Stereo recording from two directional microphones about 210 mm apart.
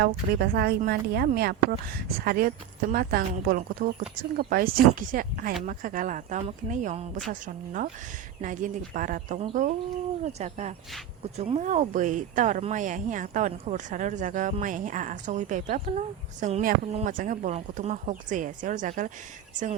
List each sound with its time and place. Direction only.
0.0 s speech: 45° right (ahead or behind)